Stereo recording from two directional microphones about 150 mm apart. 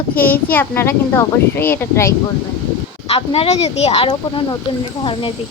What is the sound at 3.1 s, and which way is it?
A child's voice, 40° left (ahead or behind).